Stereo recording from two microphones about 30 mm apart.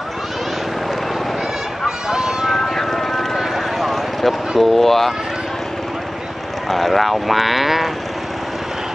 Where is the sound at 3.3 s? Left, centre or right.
Centre.